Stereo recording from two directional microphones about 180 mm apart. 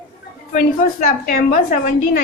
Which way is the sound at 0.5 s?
50° left (ahead or behind).